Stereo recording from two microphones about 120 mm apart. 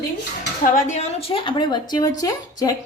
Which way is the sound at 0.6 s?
90° left.